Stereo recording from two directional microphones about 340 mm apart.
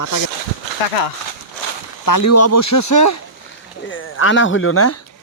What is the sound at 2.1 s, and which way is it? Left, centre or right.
Speech, left.